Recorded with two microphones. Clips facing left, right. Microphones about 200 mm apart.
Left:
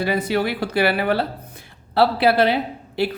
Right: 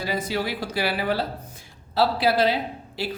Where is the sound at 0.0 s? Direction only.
60° left (ahead or behind).